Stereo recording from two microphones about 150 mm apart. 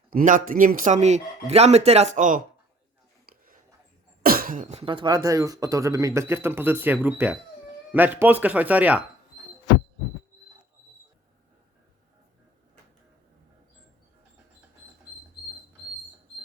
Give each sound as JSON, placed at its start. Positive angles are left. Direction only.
{"t": 0.1, "sound": "speech", "side_deg": -65}
{"t": 3.2, "sound": "a sound", "side_deg": -70}
{"t": 4.2, "sound": "cough", "side_deg": -75}
{"t": 4.8, "sound": "speech", "side_deg": -35}